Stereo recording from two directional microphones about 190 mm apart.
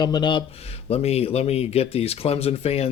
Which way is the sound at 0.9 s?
35° left (ahead or behind).